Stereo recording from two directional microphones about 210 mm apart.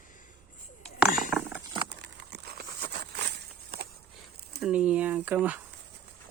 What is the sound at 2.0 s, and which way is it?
Crumpling, 50° right (ahead or behind).